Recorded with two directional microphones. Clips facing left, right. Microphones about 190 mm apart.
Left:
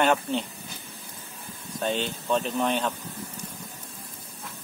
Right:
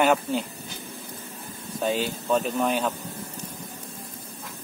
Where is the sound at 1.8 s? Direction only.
5° right (ahead or behind).